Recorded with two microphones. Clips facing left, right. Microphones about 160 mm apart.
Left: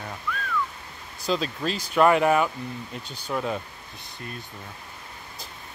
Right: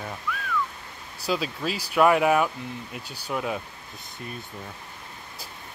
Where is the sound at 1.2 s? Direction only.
5° right (ahead or behind).